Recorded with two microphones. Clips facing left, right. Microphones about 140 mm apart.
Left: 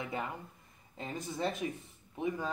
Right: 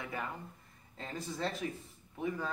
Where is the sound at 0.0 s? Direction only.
20° left (ahead or behind).